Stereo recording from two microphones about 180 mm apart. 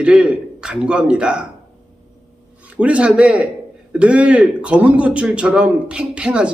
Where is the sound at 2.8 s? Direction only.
5° right (ahead or behind).